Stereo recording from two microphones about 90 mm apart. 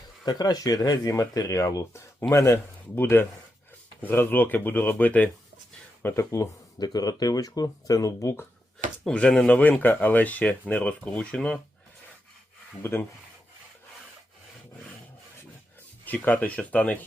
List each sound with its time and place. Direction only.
0.3 s speech: 50° left (ahead or behind)
2.3 s speech: 30° left (ahead or behind)
6.0 s speech: 30° left (ahead or behind)
6.7 s speech: 45° left (ahead or behind)
9.0 s speech: 10° left (ahead or behind)
9.6 s speech: 20° left (ahead or behind)
12.8 s speech: 25° left (ahead or behind)
16.0 s speech: 15° left (ahead or behind)